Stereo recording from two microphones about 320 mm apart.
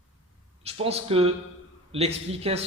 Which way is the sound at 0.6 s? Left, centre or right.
Centre.